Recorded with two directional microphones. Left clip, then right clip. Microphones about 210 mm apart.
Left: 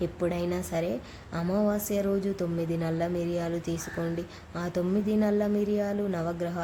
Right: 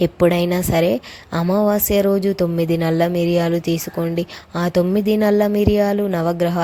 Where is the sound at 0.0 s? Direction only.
35° right (ahead or behind).